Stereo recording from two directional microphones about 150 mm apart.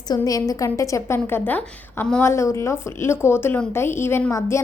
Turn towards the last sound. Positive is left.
turn(degrees=15)  # may be behind; listen again after turning